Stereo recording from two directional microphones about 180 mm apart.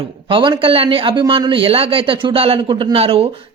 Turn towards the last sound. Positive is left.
turn(degrees=-30)  # may be behind; listen again after turning